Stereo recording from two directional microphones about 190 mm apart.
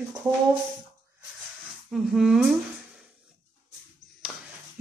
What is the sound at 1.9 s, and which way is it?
Speech, centre (ahead or behind).